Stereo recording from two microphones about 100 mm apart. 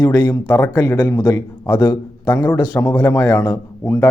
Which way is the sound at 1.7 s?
45° left (ahead or behind).